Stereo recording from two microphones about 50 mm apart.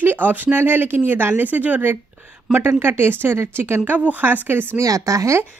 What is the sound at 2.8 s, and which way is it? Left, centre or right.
Speech, right.